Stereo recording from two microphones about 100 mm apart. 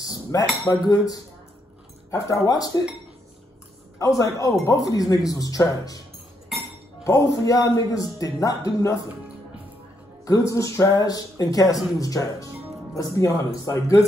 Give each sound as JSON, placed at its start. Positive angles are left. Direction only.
{"t": 0.0, "sound": "cutlery", "side_deg": 40}
{"t": 0.7, "sound": "a man's voice", "side_deg": 40}
{"t": 4.0, "sound": "a man's voice", "side_deg": 35}
{"t": 7.1, "sound": "a man's voice", "side_deg": 35}
{"t": 10.2, "sound": "a man's voice", "side_deg": 35}